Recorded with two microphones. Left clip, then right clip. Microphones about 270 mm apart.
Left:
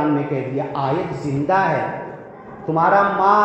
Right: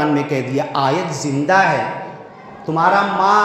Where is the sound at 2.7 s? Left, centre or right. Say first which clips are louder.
Right 1 dB; right.